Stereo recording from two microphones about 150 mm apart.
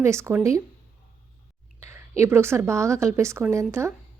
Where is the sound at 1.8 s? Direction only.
20° right (ahead or behind).